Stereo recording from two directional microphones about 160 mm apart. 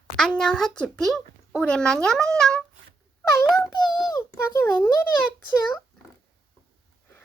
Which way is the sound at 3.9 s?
25° left (ahead or behind).